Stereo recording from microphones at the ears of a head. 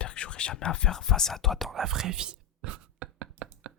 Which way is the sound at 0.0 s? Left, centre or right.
Left.